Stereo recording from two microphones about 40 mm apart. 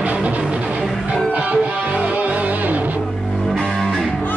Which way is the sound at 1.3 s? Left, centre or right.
Right.